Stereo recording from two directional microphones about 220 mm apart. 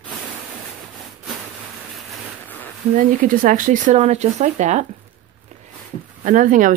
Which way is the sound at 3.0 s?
40° right (ahead or behind).